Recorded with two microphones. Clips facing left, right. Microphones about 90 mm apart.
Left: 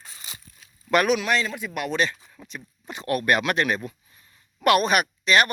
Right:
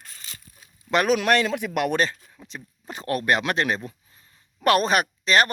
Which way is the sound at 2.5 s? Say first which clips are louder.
Even; 35° right (ahead or behind).